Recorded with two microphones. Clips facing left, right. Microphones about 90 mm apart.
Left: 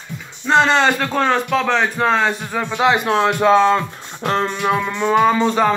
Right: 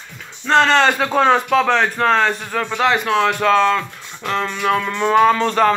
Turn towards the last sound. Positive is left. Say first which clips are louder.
# right 1 dB
turn(degrees=10)  # may be behind; listen again after turning